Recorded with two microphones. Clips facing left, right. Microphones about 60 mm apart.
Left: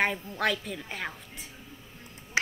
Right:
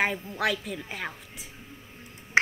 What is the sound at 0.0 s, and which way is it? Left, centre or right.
A woman's voice, centre.